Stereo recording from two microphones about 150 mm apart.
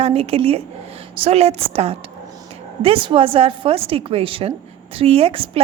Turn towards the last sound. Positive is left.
turn(degrees=-40)  # may be behind; listen again after turning